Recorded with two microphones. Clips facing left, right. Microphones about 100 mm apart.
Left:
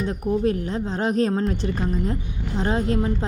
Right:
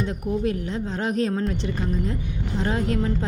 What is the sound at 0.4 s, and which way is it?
A woman's voice, 35° left (ahead or behind).